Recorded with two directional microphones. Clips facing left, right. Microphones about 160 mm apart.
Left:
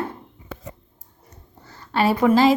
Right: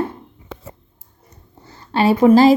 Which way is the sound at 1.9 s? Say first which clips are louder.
Right 5 dB; 25° right (ahead or behind).